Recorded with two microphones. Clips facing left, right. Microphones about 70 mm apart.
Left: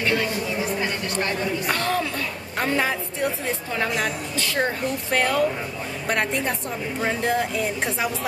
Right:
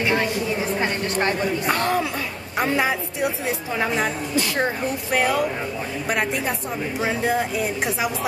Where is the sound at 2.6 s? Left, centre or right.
Centre.